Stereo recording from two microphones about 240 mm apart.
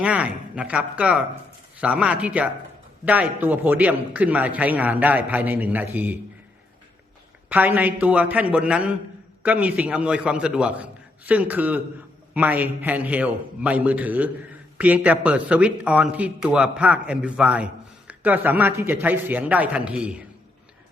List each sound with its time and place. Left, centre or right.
0.0 s a man's voice: centre
7.5 s a man's voice: centre